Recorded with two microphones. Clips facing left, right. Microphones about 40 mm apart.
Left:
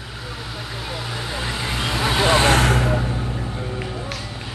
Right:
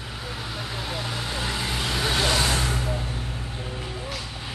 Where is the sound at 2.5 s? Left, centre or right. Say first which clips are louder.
Left 9 dB; left.